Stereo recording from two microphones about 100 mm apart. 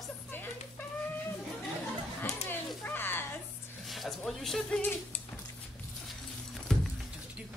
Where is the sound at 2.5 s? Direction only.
20° left (ahead or behind).